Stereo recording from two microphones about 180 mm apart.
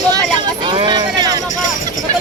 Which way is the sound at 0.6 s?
25° right (ahead or behind).